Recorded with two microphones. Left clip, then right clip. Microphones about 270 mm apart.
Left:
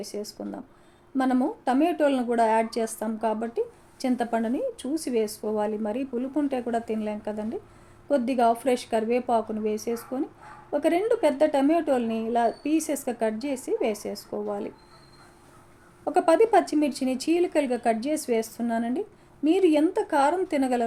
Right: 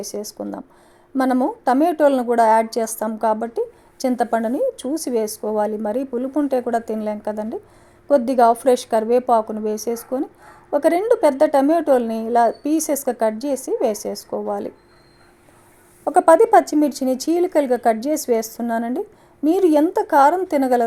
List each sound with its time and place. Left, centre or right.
0.0 s speech: right
16.0 s speech: right